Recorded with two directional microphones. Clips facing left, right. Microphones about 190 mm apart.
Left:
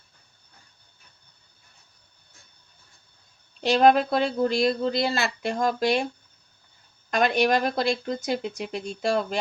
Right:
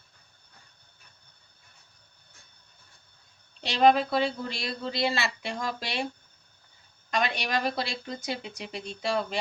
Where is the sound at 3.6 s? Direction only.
50° left (ahead or behind).